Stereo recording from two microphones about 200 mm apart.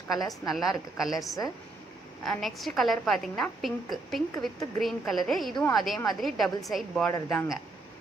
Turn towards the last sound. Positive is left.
turn(degrees=5)  # may be behind; listen again after turning